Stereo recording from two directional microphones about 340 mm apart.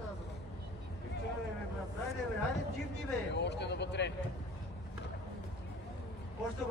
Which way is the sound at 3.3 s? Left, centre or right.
Left.